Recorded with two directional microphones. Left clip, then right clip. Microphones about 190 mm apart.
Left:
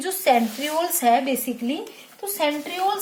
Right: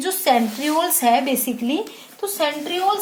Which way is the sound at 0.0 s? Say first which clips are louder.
Right 1 dB; 5° left (ahead or behind).